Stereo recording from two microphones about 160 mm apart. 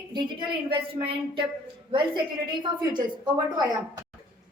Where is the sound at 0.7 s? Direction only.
30° right (ahead or behind).